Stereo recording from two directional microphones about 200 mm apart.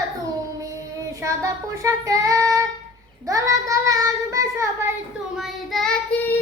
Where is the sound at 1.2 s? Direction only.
15° right (ahead or behind).